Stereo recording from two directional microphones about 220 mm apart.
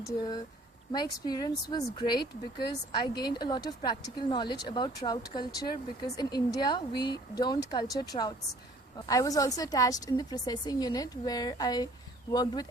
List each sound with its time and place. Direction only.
0.9 s a woman's voice: 20° left (ahead or behind)